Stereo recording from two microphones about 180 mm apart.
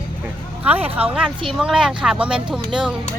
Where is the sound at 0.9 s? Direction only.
10° right (ahead or behind).